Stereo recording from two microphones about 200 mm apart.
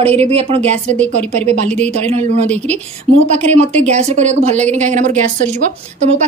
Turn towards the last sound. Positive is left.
turn(degrees=-35)  # may be behind; listen again after turning